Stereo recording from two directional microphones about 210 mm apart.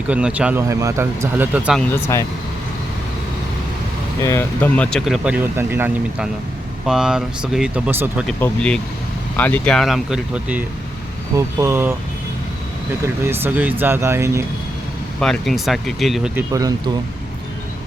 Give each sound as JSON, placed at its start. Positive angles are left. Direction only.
{"t": 0.1, "sound": "speech", "side_deg": -5}
{"t": 1.9, "sound": "speech", "side_deg": 15}
{"t": 4.2, "sound": "speech", "side_deg": 15}
{"t": 8.3, "sound": "speech", "side_deg": 5}
{"t": 13.2, "sound": "speech", "side_deg": -10}
{"t": 15.2, "sound": "speech", "side_deg": 0}
{"t": 16.5, "sound": "speech", "side_deg": -15}